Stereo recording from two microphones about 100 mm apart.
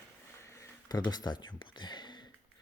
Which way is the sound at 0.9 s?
45° left (ahead or behind).